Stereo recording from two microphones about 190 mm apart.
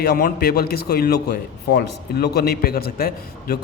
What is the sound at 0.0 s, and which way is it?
A man's voice, 50° left (ahead or behind).